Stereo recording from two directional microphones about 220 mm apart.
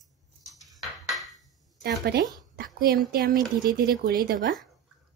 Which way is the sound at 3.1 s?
45° right (ahead or behind).